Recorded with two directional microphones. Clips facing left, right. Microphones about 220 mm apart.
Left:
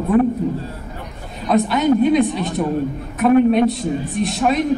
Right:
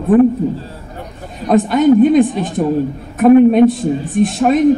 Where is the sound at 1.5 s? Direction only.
50° right (ahead or behind).